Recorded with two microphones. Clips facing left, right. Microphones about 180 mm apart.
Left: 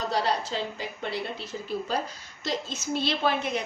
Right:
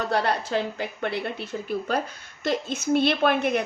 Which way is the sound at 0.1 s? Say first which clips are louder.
Right 4 dB; 60° right (ahead or behind).